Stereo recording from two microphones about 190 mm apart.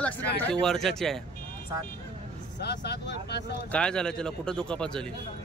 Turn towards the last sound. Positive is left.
turn(degrees=5)  # may be behind; listen again after turning